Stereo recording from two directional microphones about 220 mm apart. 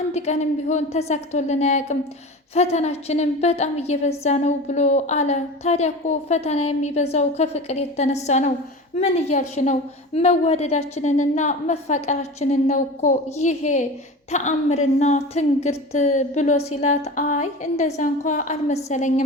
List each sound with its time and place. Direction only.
0.1 s a woman's voice: 30° left (ahead or behind)